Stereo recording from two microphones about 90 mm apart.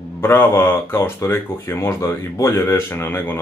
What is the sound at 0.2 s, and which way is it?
Speech, 25° left (ahead or behind).